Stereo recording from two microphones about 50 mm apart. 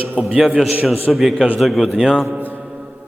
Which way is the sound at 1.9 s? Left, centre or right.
Centre.